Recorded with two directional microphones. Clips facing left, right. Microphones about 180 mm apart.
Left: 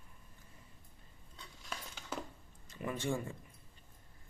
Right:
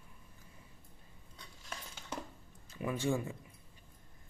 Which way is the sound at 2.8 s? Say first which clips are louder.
Right 3 dB; 5° right (ahead or behind).